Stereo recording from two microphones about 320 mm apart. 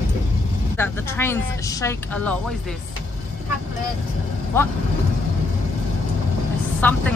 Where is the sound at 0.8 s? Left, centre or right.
Centre.